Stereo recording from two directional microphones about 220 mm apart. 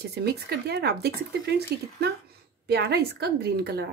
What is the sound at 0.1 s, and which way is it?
Speech, 45° right (ahead or behind).